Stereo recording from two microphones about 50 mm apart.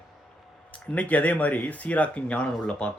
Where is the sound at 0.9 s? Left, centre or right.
Left.